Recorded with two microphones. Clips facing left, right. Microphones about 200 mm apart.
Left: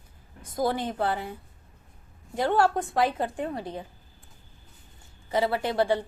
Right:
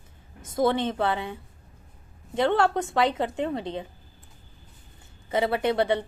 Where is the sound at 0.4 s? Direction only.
25° right (ahead or behind).